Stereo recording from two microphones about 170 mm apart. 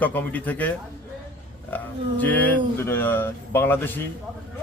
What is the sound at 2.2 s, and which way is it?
Speech, 10° left (ahead or behind).